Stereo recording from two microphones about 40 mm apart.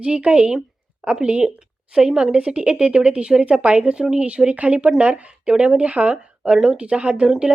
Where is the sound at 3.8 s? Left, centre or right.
Right.